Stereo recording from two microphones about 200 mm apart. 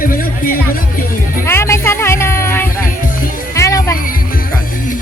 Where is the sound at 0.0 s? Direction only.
45° left (ahead or behind).